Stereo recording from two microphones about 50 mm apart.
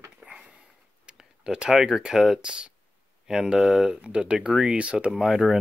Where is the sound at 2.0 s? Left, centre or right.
Centre.